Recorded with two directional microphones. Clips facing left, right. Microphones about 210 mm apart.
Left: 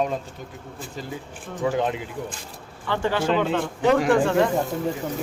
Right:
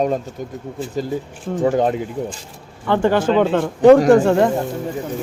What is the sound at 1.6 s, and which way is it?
Speech, 40° right (ahead or behind).